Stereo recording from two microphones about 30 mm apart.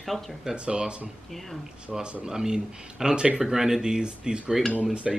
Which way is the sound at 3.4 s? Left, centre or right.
Centre.